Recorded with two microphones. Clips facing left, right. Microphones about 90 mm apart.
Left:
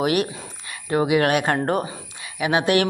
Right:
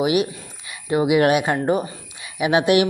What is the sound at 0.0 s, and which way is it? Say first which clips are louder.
Speech: right 2 dB; 5° right (ahead or behind).